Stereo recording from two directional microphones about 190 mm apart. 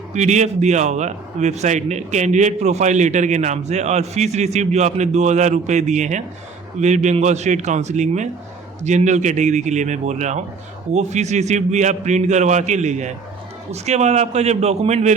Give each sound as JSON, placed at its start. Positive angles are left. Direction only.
{"t": 0.1, "sound": "a man's voice", "side_deg": -40}